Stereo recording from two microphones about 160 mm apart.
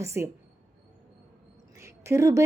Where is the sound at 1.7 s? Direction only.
15° right (ahead or behind).